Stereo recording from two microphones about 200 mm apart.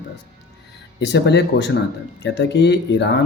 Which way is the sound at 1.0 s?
60° left (ahead or behind).